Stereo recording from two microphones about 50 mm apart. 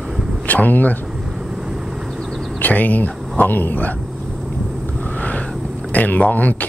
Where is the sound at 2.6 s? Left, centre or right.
Left.